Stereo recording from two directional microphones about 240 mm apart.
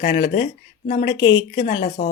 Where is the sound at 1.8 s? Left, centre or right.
Left.